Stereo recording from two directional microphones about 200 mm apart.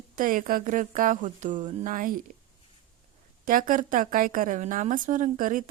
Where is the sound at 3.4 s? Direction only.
45° right (ahead or behind).